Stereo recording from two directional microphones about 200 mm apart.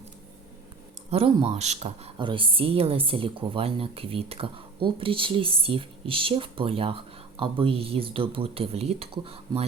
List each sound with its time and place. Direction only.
1.1 s speech: 30° right (ahead or behind)